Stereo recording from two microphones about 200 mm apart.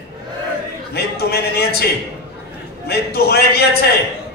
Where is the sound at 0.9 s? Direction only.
55° left (ahead or behind).